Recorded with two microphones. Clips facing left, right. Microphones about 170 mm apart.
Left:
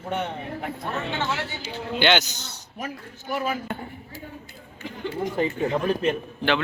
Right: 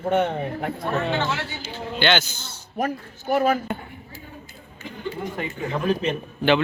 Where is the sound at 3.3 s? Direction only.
50° right (ahead or behind).